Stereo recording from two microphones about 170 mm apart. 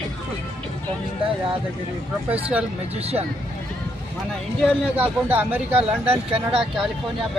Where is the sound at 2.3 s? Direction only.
10° right (ahead or behind).